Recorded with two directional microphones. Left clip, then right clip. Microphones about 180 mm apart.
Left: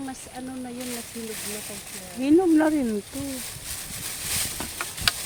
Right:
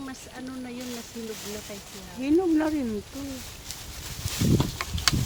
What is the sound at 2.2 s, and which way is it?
Speech, 20° left (ahead or behind).